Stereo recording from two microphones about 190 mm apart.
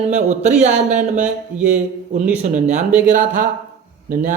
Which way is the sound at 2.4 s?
40° right (ahead or behind).